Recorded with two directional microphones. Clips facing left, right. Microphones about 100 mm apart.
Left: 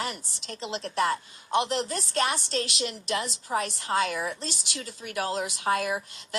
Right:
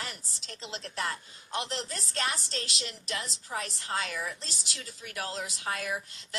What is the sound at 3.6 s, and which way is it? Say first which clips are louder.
Speech: left 7 dB; 90° left.